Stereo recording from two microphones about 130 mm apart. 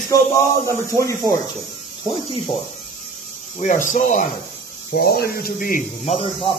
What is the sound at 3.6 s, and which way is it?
Speech, 75° left (ahead or behind).